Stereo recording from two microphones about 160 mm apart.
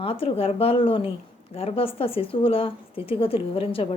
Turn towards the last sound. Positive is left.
turn(degrees=35)  # may be behind; listen again after turning